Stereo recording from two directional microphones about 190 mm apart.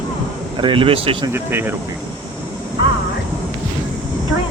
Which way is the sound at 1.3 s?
10° right (ahead or behind).